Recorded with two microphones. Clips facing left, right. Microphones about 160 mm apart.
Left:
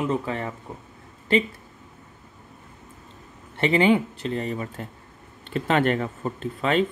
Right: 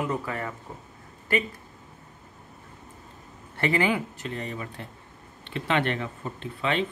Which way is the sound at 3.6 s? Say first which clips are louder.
Left 5 dB; 25° left (ahead or behind).